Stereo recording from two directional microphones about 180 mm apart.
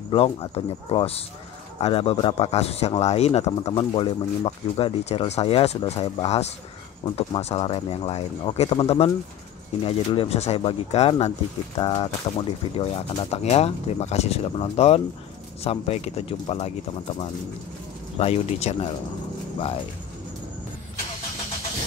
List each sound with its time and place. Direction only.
0.1 s a man's voice: 30° left (ahead or behind)